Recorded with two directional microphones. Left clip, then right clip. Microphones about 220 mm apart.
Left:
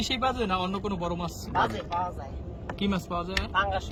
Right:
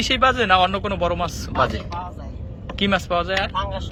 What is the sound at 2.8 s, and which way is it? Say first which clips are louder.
Speech: right 11 dB; 5° right (ahead or behind).